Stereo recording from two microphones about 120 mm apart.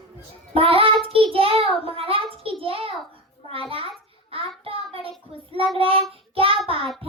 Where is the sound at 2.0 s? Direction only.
50° right (ahead or behind).